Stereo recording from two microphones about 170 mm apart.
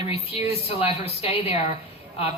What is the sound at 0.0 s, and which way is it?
A man's voice, 35° left (ahead or behind).